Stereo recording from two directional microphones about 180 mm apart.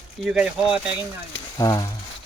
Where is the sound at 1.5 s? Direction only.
20° left (ahead or behind).